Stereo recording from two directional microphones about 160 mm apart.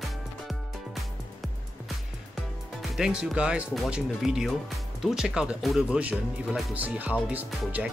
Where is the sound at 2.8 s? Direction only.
Centre (ahead or behind).